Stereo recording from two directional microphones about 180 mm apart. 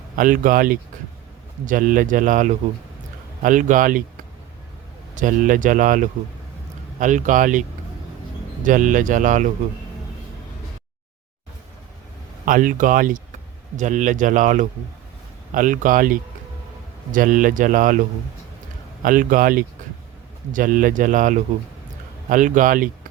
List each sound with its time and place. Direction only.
0.2 s speech: 50° right (ahead or behind)
5.1 s speech: 45° right (ahead or behind)
8.6 s speech: 45° right (ahead or behind)
12.5 s speech: 45° right (ahead or behind)
19.0 s speech: 50° right (ahead or behind)